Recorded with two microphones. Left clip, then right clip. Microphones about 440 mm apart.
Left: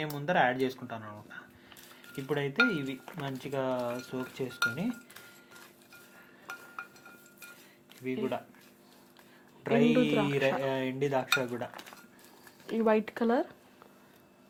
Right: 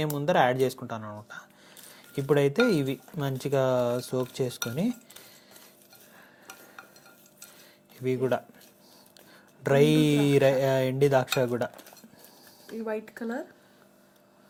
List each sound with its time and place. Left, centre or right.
0.0 s speech: right
8.0 s speech: right
9.6 s speech: right
12.8 s speech: left